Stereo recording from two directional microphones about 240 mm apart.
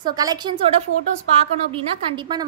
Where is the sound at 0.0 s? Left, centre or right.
Centre.